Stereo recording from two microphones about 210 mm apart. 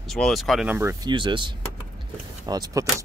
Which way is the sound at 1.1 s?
20° right (ahead or behind).